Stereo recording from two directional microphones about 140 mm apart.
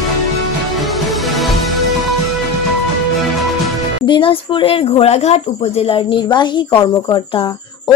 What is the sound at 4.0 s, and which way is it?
Speech, 35° left (ahead or behind).